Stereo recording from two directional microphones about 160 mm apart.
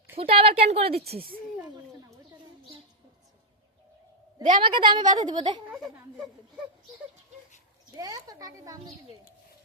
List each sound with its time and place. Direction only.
0.2 s a woman's voice: 35° right (ahead or behind)
1.1 s speech: 65° right (ahead or behind)
4.6 s a woman's voice: 30° right (ahead or behind)
5.6 s a sound: 5° right (ahead or behind)
7.9 s a woman's voice: 20° right (ahead or behind)